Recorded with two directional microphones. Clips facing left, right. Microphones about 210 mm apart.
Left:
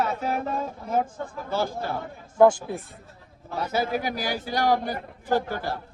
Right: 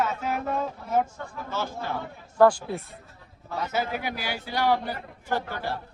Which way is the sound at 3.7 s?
35° left (ahead or behind).